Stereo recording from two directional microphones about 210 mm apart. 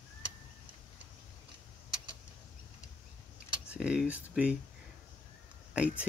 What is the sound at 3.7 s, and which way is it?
Speech, 5° right (ahead or behind).